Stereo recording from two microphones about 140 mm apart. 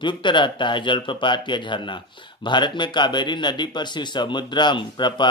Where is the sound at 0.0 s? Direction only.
35° left (ahead or behind).